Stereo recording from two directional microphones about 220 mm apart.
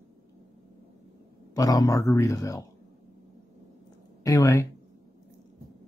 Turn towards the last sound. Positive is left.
turn(degrees=15)  # may be behind; listen again after turning